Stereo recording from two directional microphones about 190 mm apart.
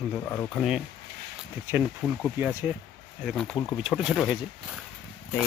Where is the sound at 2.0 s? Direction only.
Centre (ahead or behind).